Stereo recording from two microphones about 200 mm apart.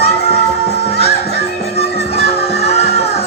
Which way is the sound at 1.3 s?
55° left (ahead or behind).